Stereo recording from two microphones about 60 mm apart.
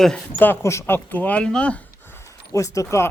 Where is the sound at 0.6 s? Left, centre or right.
Left.